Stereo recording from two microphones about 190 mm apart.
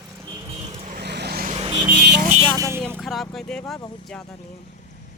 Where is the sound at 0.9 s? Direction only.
60° right (ahead or behind).